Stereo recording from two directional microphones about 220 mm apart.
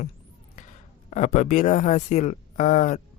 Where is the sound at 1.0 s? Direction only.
30° left (ahead or behind).